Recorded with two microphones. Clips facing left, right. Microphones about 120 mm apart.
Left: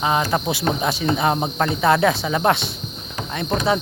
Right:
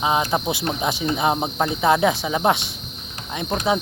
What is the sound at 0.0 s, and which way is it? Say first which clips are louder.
Cricket: left 1 dB; 15° right (ahead or behind).